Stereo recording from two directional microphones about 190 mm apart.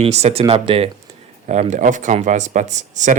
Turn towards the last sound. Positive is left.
turn(degrees=-40)  # may be behind; listen again after turning